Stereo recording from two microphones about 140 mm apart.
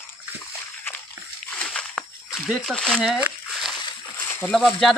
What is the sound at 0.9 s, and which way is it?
Slosh, 15° left (ahead or behind).